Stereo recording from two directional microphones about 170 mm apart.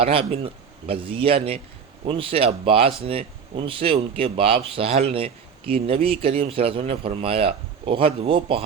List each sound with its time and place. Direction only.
0.0 s speech: 35° right (ahead or behind)